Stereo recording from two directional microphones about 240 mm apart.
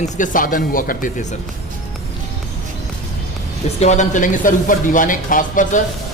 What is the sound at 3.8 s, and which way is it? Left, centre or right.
Speech, left.